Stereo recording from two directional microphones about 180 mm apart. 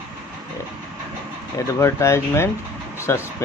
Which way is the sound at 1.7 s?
15° left (ahead or behind).